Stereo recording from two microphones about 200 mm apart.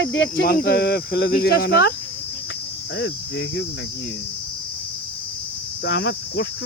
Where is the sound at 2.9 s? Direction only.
65° left (ahead or behind).